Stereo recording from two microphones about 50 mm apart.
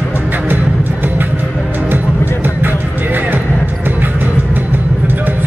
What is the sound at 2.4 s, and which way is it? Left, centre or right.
Music, right.